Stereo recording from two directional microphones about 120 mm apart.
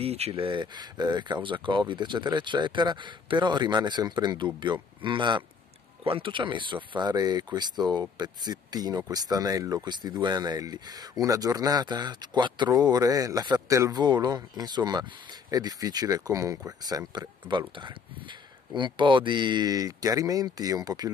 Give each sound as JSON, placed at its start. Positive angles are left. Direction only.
{"t": 0.0, "sound": "speech", "side_deg": -60}
{"t": 0.3, "sound": "speech", "side_deg": -40}